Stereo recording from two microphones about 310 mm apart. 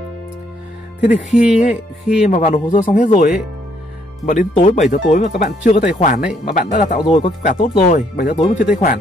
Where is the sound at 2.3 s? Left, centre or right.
Left.